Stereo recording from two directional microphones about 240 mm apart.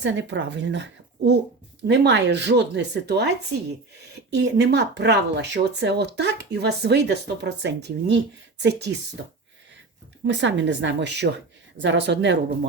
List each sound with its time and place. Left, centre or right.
0.0 s speech: right
10.2 s speech: right